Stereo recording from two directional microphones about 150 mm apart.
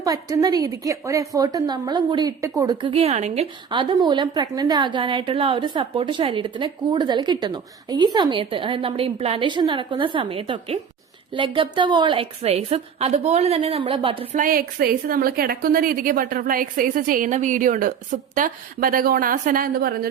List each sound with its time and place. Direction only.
0.0 s a woman's voice: 25° right (ahead or behind)
2.9 s speech: 45° right (ahead or behind)
3.7 s a woman's voice: 35° right (ahead or behind)
14.3 s a woman's voice: 70° right (ahead or behind); by 20.1 s 90° right